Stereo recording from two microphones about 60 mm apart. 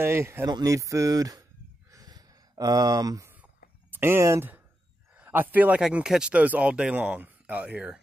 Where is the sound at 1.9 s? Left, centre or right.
Right.